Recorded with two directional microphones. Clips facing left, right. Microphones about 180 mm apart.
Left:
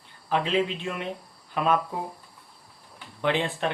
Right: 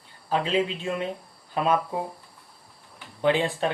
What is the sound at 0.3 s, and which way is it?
A man's voice, 35° right (ahead or behind).